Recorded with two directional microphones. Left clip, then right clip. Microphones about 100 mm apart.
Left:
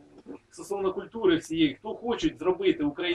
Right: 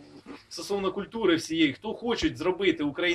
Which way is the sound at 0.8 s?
15° right (ahead or behind).